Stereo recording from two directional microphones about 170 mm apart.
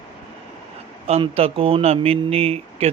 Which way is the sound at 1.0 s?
35° right (ahead or behind).